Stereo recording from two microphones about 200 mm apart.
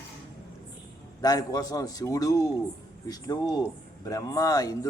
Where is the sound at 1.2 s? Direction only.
20° left (ahead or behind).